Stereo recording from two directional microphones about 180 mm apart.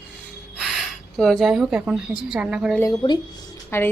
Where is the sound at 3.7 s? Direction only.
15° left (ahead or behind).